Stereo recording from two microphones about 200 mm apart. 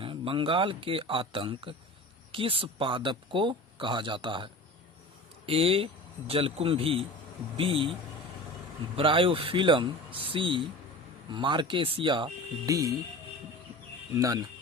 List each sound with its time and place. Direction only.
0.0 s speech: 25° right (ahead or behind)
9.0 s speech: 25° right (ahead or behind)
14.1 s speech: 15° right (ahead or behind)